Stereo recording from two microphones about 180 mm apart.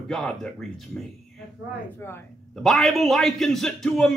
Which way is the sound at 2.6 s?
Centre (ahead or behind).